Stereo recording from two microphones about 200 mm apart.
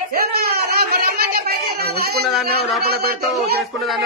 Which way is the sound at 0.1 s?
50° right (ahead or behind).